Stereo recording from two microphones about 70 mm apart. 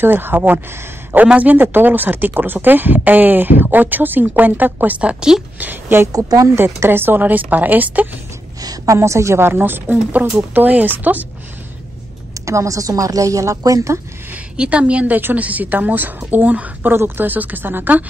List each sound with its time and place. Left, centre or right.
0.0 s speech: right; by 5.4 s centre
5.6 s a woman's voice: right
6.1 s a woman's voice: right
6.6 s speech: right
8.5 s a sound: right
8.9 s a woman's voice: right
12.4 s a woman's voice: right
14.3 s a woman's voice: centre